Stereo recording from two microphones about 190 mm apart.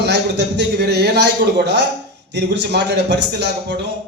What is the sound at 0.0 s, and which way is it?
A man's voice, 60° right (ahead or behind).